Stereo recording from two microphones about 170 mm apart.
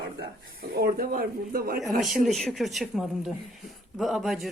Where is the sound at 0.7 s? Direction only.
65° right (ahead or behind).